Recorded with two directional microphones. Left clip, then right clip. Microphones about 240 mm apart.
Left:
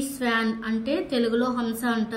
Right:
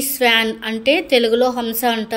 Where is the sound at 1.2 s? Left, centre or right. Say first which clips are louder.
Right 9 dB; centre.